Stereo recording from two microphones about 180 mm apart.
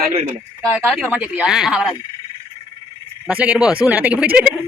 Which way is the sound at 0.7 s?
Centre (ahead or behind).